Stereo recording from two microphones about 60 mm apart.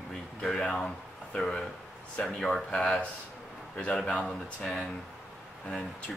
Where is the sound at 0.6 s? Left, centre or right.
Centre.